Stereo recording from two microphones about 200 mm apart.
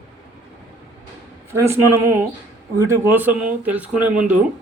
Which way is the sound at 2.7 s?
15° right (ahead or behind).